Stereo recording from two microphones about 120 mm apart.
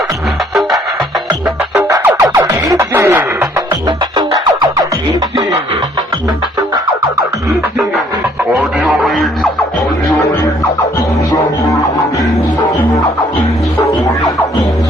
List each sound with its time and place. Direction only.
1.8 s music: 20° right (ahead or behind)
3.8 s music: 35° right (ahead or behind)
8.5 s radio: centre (ahead or behind)
11.3 s music: 25° left (ahead or behind)
13.7 s music: 25° left (ahead or behind)